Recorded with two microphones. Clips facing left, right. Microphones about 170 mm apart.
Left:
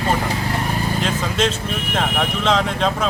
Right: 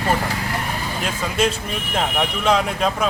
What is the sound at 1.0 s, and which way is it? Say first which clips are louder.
Speech: right 2 dB; 10° right (ahead or behind).